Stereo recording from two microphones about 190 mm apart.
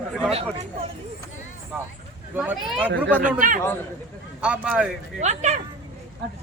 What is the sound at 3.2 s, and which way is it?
Speech, 45° right (ahead or behind).